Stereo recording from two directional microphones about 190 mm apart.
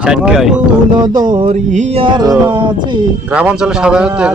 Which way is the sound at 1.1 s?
45° right (ahead or behind).